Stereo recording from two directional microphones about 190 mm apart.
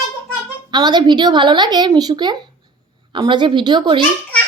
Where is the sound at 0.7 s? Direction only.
20° right (ahead or behind).